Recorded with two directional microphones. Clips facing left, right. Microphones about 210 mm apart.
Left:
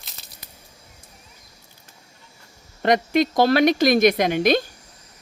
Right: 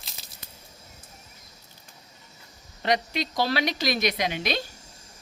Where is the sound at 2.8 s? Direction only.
50° left (ahead or behind).